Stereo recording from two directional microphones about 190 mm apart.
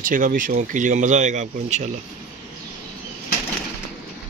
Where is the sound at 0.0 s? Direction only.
45° right (ahead or behind).